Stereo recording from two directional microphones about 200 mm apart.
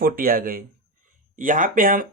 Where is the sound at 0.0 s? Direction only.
45° right (ahead or behind).